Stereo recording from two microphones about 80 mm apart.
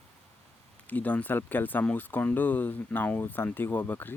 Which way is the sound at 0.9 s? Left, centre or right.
Centre.